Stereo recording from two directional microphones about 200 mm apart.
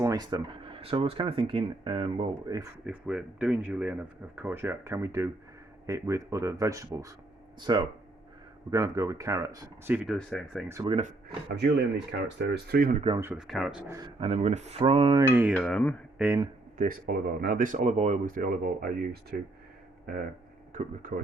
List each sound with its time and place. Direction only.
0.0 s speech: 20° right (ahead or behind)
2.8 s speech: 5° right (ahead or behind)
10.2 s speech: centre (ahead or behind)
10.7 s speech: 15° right (ahead or behind)
11.4 s speech: 60° right (ahead or behind)
13.1 s speech: 10° right (ahead or behind)
14.2 s speech: 30° right (ahead or behind)
15.5 s speech: 5° left (ahead or behind)
16.1 s speech: 10° right (ahead or behind)
16.7 s speech: 45° right (ahead or behind)
20.7 s speech: 45° right (ahead or behind)